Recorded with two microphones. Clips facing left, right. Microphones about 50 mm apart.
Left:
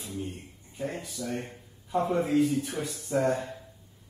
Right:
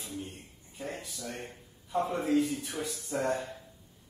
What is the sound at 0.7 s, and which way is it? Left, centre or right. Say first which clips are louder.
Speech: left 5 dB; left.